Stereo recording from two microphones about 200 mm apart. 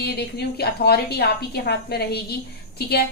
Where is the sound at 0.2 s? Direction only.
55° left (ahead or behind).